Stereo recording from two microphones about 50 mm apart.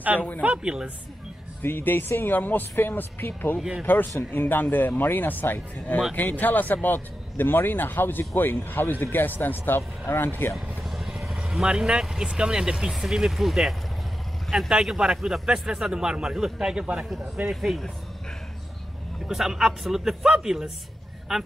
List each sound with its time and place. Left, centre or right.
0.4 s speech: right
1.6 s speech: left
10.8 s vehicle: centre
11.4 s a man's voice: centre
17.5 s speech: centre
19.2 s a man's voice: centre